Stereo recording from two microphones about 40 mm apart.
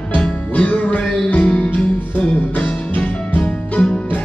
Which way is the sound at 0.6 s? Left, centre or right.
Left.